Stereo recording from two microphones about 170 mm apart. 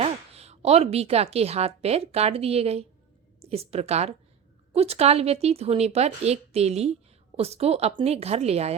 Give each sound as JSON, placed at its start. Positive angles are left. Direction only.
{"t": 0.0, "sound": "speech", "side_deg": -40}